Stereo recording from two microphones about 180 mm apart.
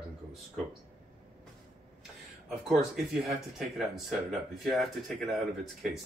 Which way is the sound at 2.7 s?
Centre (ahead or behind).